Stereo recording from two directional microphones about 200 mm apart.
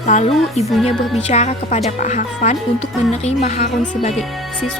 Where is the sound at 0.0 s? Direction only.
35° left (ahead or behind).